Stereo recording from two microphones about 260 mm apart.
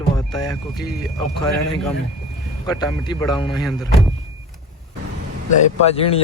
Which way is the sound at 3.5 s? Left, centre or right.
Centre.